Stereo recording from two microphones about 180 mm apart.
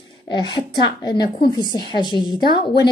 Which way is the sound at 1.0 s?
25° left (ahead or behind).